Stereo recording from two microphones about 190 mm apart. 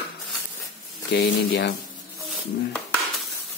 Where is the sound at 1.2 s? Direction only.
50° left (ahead or behind).